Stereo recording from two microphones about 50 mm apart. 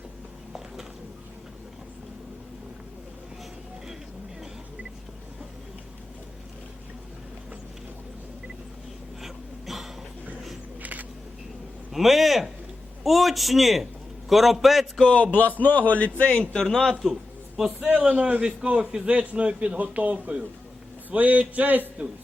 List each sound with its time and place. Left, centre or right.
9.2 s throat clearing: centre
10.8 s a sound: right
11.9 s a man's voice: centre
15.1 s speech: left
16.6 s speech: centre
18.1 s a man's voice: right
19.1 s a man's voice: right